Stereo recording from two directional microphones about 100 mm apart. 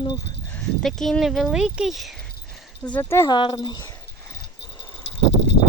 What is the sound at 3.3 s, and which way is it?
Speech, 50° left (ahead or behind).